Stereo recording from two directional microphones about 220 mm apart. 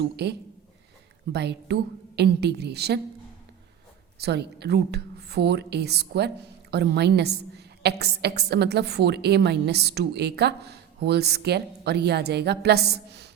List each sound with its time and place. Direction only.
0.0 s a woman's voice: 50° right (ahead or behind)
4.2 s a woman's voice: 50° right (ahead or behind)